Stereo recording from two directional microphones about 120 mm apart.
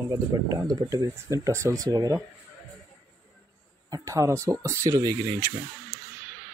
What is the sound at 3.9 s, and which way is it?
Speech, 25° right (ahead or behind).